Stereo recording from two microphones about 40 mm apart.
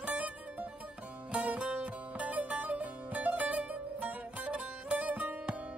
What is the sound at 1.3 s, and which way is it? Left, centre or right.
Music, right.